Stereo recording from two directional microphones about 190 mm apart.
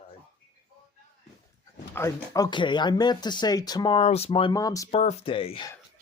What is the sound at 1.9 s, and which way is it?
Speech, 15° left (ahead or behind).